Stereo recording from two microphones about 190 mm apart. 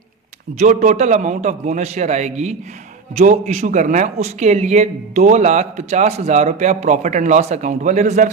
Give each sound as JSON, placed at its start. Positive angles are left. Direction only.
{"t": 0.6, "sound": "speech", "side_deg": -40}